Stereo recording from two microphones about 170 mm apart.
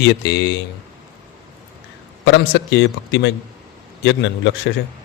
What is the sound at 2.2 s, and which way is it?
A man's voice, 90° left.